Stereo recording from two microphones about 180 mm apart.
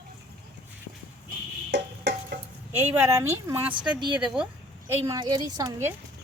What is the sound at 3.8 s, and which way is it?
Speech, 25° right (ahead or behind).